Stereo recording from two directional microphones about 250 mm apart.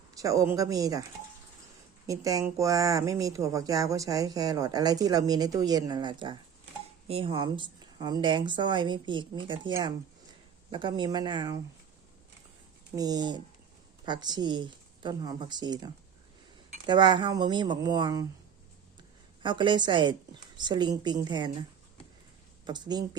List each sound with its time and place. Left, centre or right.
0.1 s speech: centre
2.0 s speech: centre
13.0 s speech: centre
19.4 s speech: centre
22.6 s speech: centre